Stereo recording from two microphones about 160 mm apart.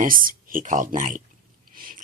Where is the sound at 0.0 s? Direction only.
60° right (ahead or behind).